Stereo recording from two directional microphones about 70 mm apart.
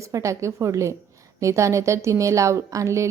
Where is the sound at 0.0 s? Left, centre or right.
Right.